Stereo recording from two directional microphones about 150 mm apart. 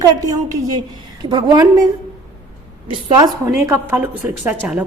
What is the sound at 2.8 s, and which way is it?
Speech, 30° right (ahead or behind).